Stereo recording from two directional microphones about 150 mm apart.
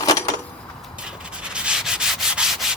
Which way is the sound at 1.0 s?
5° right (ahead or behind).